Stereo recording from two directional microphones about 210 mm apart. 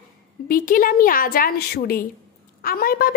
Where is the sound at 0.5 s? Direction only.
40° left (ahead or behind).